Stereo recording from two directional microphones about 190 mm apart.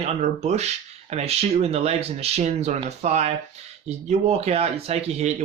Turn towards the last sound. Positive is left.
turn(degrees=-35)  # may be behind; listen again after turning